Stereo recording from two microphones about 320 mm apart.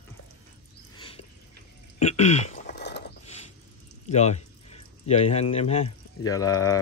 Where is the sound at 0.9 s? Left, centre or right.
Centre; by 3.0 s left.